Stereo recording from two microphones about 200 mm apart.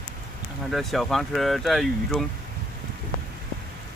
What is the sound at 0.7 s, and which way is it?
Speech, centre (ahead or behind).